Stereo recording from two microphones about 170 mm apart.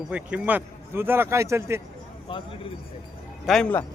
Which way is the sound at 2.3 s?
30° left (ahead or behind).